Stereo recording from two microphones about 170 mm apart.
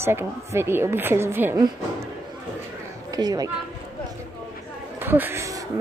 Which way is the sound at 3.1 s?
20° right (ahead or behind).